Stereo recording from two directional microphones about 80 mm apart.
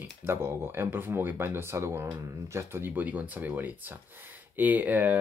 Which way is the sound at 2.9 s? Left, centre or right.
Centre.